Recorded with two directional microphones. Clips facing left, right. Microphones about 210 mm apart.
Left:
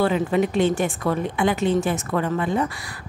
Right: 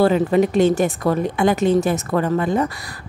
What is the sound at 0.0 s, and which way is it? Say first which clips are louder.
A woman's voice: right 5 dB; 40° right (ahead or behind).